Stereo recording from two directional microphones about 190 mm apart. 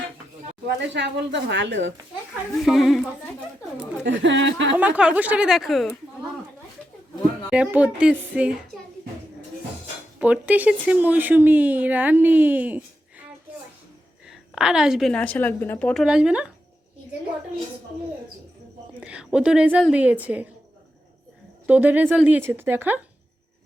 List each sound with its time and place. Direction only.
0.8 s a woman's voice: 65° right (ahead or behind)
2.6 s a woman's voice: centre (ahead or behind)
4.0 s a woman's voice: 75° right (ahead or behind)
4.8 s speech: 5° right (ahead or behind)
7.5 s a woman's voice: 5° right (ahead or behind)
10.2 s speech: 5° right (ahead or behind)
14.3 s a woman's voice: 5° right (ahead or behind)
16.0 s a woman's voice: 5° right (ahead or behind)
18.9 s a woman's voice: 5° right (ahead or behind)
21.7 s speech: 10° right (ahead or behind)